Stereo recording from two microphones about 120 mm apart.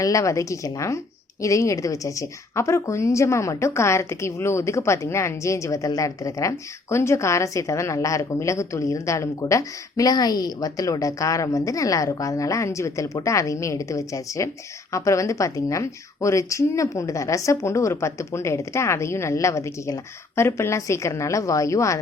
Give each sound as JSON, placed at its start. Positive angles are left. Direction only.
{"t": 0.0, "sound": "a woman's voice", "side_deg": 25}